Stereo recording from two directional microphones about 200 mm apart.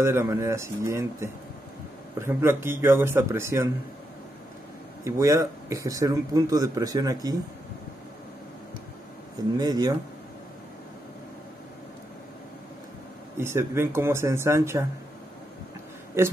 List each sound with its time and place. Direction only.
0.0 s speech: 15° right (ahead or behind)
5.0 s speech: 15° right (ahead or behind)
9.6 s speech: 20° right (ahead or behind)
13.4 s speech: 15° right (ahead or behind)